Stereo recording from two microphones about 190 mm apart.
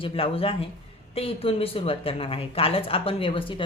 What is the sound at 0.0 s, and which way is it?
Speech, 30° left (ahead or behind).